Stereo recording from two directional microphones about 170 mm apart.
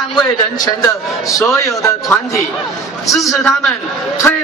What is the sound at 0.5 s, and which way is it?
A man's voice, 20° left (ahead or behind).